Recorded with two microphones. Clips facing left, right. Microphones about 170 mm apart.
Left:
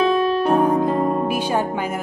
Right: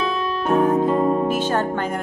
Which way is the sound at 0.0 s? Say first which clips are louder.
Left 6 dB; 45° left (ahead or behind).